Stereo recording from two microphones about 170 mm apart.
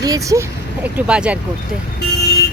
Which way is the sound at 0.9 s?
5° right (ahead or behind).